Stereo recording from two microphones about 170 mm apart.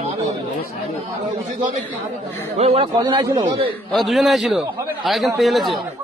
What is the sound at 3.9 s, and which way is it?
A man's voice, centre (ahead or behind).